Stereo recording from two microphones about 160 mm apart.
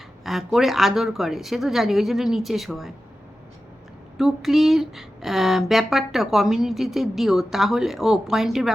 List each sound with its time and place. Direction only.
0.3 s speech: centre (ahead or behind)
4.2 s speech: centre (ahead or behind)